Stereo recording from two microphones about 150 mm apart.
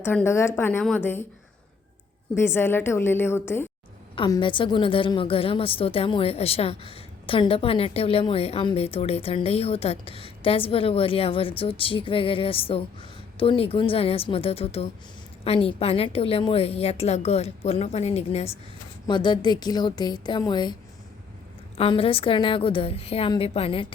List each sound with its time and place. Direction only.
0.0 s a woman's voice: 15° left (ahead or behind)
2.3 s a woman's voice: 15° left (ahead or behind)
4.3 s a woman's voice: 35° left (ahead or behind)
19.0 s a woman's voice: 30° left (ahead or behind)
21.8 s a woman's voice: 40° left (ahead or behind)